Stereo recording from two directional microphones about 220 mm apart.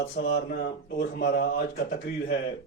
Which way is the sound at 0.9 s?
50° left (ahead or behind).